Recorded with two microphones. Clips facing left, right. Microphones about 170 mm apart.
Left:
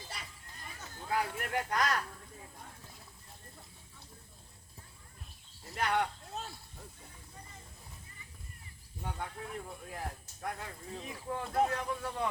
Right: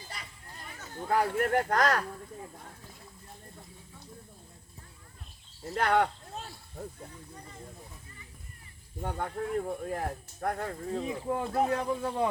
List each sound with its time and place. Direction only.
1.0 s speech: 55° right (ahead or behind)
5.7 s speech: 55° right (ahead or behind)
9.0 s speech: 55° right (ahead or behind)
11.3 s speech: 35° right (ahead or behind)